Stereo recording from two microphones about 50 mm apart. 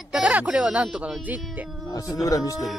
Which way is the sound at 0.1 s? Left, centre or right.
Right.